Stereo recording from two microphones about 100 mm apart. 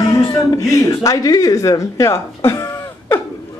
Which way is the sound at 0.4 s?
30° left (ahead or behind).